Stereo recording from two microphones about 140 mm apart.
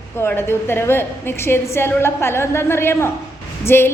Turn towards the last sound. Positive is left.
turn(degrees=15)  # may be behind; listen again after turning